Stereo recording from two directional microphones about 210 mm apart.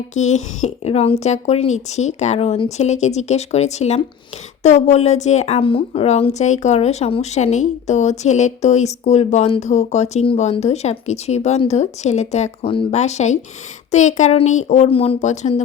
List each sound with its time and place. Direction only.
0.1 s a woman's voice: 35° left (ahead or behind)